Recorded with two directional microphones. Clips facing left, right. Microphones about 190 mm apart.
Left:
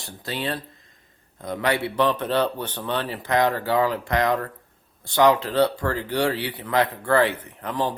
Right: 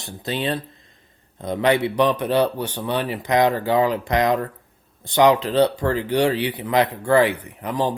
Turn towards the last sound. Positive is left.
turn(degrees=-15)  # may be behind; listen again after turning